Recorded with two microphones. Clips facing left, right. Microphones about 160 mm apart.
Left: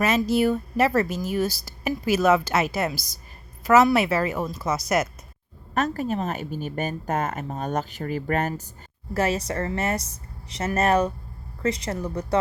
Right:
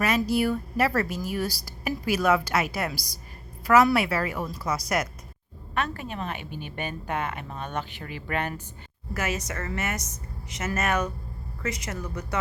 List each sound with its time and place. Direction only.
0.0 s speech: 25° left (ahead or behind)
5.7 s a woman's voice: 40° left (ahead or behind)